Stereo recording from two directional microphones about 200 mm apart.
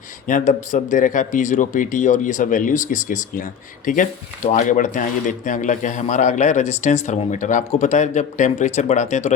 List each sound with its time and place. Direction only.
0.3 s a man's voice: 40° left (ahead or behind)